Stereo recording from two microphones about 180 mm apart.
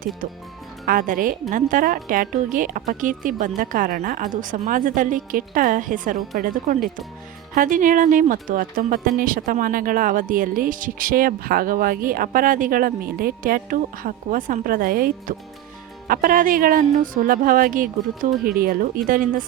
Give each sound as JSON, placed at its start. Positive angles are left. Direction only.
{"t": 0.9, "sound": "speech", "side_deg": -50}